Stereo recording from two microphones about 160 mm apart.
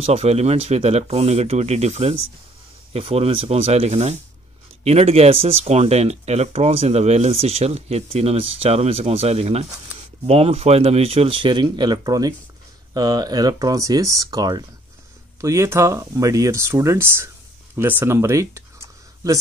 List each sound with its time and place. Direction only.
0.0 s speech: 40° right (ahead or behind); by 18.6 s 15° right (ahead or behind)